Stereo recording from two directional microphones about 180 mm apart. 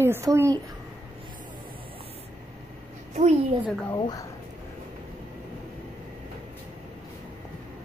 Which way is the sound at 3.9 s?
25° left (ahead or behind).